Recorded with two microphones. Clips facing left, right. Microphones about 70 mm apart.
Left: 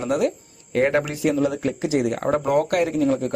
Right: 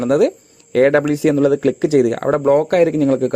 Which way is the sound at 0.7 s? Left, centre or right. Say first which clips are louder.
Right 7 dB; right.